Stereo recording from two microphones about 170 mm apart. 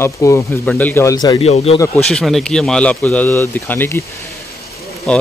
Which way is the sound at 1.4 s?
40° left (ahead or behind).